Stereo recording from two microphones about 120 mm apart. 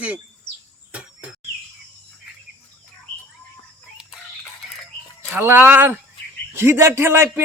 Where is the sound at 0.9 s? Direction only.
10° right (ahead or behind).